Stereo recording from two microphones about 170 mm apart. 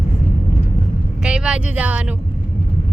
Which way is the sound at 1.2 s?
5° right (ahead or behind).